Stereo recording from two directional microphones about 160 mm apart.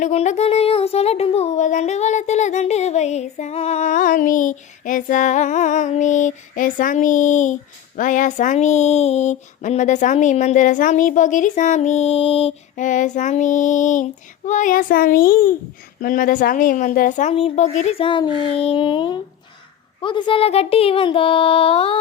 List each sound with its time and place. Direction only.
0.0 s speech: 45° left (ahead or behind)
12.7 s a child's voice: 50° left (ahead or behind); by 21.9 s 35° left (ahead or behind)